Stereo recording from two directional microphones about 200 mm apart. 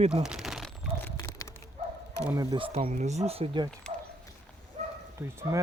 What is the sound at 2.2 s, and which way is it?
Speech, 15° right (ahead or behind).